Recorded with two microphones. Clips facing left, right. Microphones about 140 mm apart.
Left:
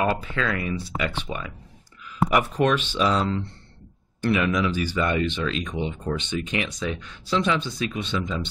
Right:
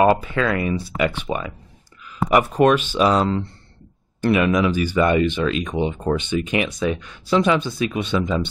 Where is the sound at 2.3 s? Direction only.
55° right (ahead or behind).